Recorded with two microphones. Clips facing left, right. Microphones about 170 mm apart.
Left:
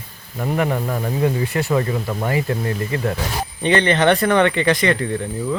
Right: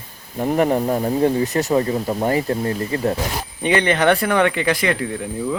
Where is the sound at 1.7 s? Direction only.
30° right (ahead or behind).